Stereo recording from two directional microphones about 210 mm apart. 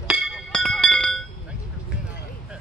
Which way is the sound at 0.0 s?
5° right (ahead or behind).